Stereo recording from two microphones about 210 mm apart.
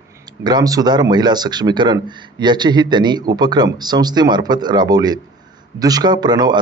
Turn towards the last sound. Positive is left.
turn(degrees=-20)  # may be behind; listen again after turning